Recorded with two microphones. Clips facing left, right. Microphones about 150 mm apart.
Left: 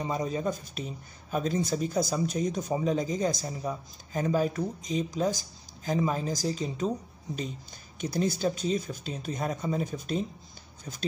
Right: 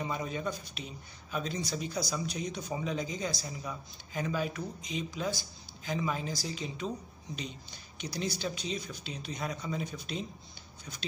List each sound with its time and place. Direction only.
0.0 s speech: 35° left (ahead or behind)
8.0 s speech: 50° left (ahead or behind)